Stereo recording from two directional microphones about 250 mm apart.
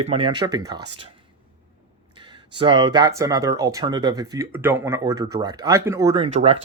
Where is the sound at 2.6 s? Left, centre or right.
Centre.